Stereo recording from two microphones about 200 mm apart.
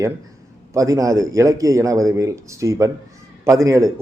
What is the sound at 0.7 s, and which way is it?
A man's voice, 15° right (ahead or behind).